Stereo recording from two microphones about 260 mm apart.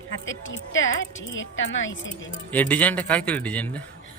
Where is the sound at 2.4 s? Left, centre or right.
Centre.